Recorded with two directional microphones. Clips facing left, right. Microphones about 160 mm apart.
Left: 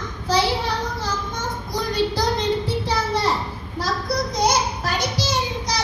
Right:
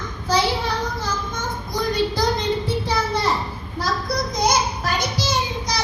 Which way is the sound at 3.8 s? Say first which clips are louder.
Even; 35° left (ahead or behind).